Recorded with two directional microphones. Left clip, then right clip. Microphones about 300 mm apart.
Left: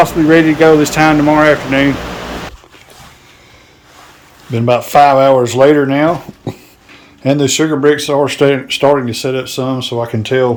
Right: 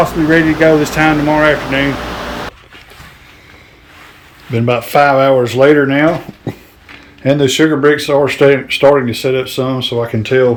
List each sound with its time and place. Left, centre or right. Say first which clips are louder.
0.0 s speech: left 2 dB; centre
4.5 s speech: left 2 dB; centre